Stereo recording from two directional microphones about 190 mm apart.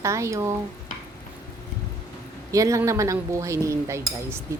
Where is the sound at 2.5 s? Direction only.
15° right (ahead or behind).